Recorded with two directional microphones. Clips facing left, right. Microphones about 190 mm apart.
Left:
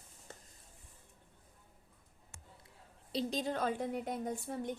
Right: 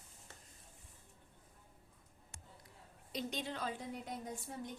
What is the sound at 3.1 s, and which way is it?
A woman's voice, 35° left (ahead or behind).